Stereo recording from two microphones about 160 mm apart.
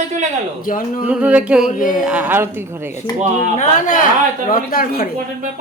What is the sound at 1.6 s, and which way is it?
Speech, 55° left (ahead or behind).